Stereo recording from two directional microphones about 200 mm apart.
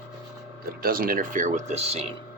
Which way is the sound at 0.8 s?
45° right (ahead or behind).